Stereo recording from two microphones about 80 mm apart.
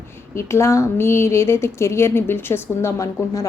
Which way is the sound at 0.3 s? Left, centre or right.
Left.